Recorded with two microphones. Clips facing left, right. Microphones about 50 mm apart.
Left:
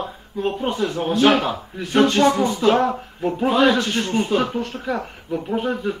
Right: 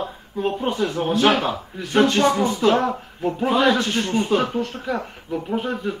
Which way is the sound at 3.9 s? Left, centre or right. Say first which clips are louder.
Even; left.